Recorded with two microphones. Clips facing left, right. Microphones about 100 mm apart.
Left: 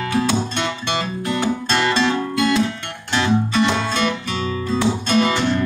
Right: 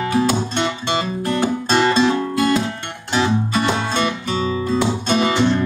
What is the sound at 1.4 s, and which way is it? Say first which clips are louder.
Music: right 3 dB; 10° right (ahead or behind).